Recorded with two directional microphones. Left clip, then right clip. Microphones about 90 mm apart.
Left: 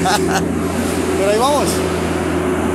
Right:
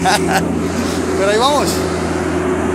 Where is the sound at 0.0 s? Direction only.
15° left (ahead or behind).